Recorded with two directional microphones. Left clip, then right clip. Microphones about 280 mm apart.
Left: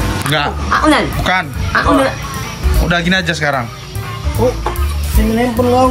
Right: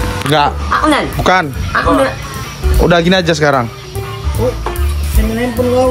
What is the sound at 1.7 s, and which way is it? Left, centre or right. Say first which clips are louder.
Speech: even; centre.